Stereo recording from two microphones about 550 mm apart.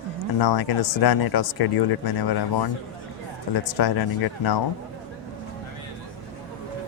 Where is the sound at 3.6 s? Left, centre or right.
Left.